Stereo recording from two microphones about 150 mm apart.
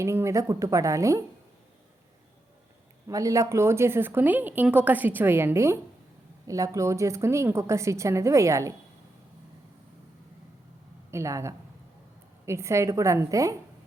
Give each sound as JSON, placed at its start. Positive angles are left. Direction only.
{"t": 0.0, "sound": "a woman's voice", "side_deg": -20}
{"t": 3.1, "sound": "a woman's voice", "side_deg": -20}
{"t": 11.1, "sound": "a woman's voice", "side_deg": -20}